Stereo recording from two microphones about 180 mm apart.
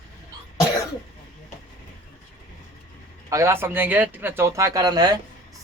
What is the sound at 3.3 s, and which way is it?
Speech, 15° right (ahead or behind).